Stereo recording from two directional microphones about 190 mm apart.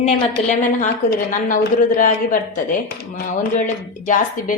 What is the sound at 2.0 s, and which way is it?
Speech, 45° left (ahead or behind).